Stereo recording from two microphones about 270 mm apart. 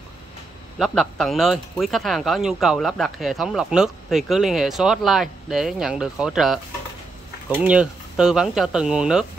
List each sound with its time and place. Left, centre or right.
0.7 s speech: centre